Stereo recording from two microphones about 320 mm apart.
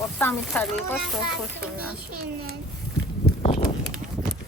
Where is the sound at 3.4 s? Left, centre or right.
Centre.